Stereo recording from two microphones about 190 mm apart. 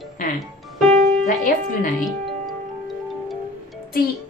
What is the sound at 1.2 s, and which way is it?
Speech, 45° left (ahead or behind).